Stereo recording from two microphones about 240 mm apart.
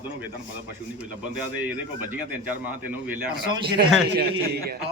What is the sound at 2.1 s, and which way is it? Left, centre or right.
A man's voice, centre.